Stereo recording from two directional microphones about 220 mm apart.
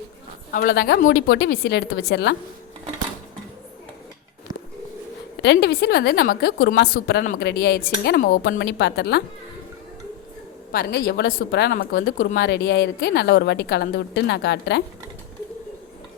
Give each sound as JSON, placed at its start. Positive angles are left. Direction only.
{"t": 0.5, "sound": "speech", "side_deg": 45}
{"t": 5.4, "sound": "speech", "side_deg": 50}
{"t": 10.7, "sound": "speech", "side_deg": 45}